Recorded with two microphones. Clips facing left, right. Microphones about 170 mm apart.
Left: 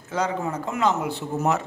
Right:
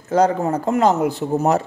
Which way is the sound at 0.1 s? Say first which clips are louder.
Right 9 dB; 45° right (ahead or behind).